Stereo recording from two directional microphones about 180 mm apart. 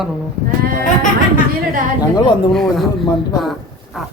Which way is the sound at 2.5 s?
Centre (ahead or behind).